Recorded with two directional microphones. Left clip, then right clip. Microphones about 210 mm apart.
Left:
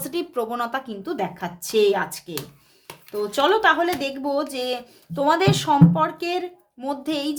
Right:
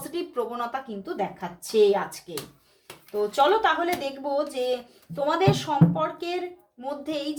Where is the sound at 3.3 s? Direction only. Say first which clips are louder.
Left 3 dB; 45° left (ahead or behind).